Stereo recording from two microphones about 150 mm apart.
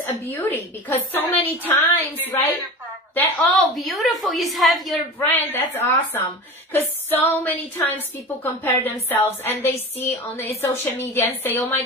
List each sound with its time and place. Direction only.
0.0 s a woman's voice: 15° left (ahead or behind)
3.2 s a woman's voice: 10° left (ahead or behind)
5.2 s a woman's voice: 15° left (ahead or behind)